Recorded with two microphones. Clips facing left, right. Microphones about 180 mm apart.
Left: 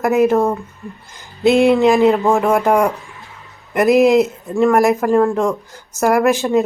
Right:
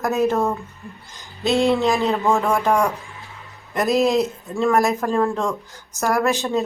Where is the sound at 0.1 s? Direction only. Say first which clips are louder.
Left 6 dB; 15° left (ahead or behind).